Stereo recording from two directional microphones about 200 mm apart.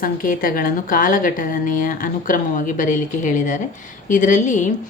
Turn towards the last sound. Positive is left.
turn(degrees=40)  # may be behind; listen again after turning